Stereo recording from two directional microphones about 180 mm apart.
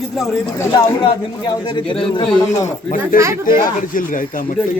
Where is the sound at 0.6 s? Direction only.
25° left (ahead or behind).